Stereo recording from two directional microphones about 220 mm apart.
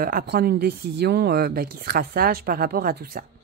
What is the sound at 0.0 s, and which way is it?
Speech, 40° right (ahead or behind).